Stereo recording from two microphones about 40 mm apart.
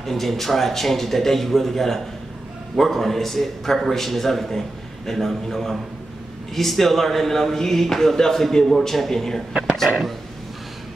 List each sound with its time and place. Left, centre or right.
0.0 s a man's voice: centre
9.5 s a sound: right
9.8 s a man's voice: centre